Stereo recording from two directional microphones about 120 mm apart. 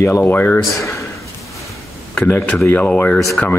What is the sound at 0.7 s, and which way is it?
Speech, 25° left (ahead or behind).